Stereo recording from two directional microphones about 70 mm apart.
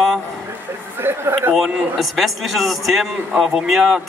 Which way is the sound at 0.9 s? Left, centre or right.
Right.